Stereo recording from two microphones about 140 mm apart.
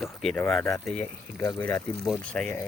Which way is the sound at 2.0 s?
5° left (ahead or behind).